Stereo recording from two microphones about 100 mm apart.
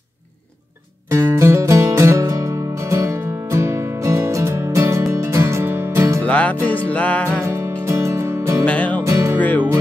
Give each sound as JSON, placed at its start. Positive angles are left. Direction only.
{"t": 1.1, "sound": "music", "side_deg": -30}
{"t": 6.2, "sound": "music", "side_deg": 15}
{"t": 7.8, "sound": "music", "side_deg": -30}
{"t": 8.6, "sound": "music", "side_deg": 15}
{"t": 9.0, "sound": "music", "side_deg": -30}
{"t": 9.4, "sound": "music", "side_deg": 15}